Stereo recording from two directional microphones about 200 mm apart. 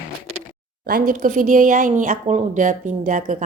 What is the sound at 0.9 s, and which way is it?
Speech, 45° right (ahead or behind).